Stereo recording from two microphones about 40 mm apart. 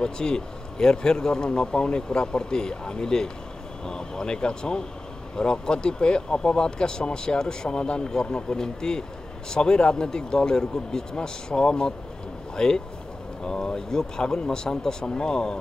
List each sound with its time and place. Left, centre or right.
0.0 s speech: centre